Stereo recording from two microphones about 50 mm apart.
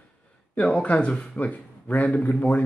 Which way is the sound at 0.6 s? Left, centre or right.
Left.